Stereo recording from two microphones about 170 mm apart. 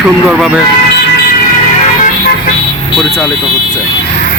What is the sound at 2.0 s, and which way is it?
Vehicle, 65° left (ahead or behind).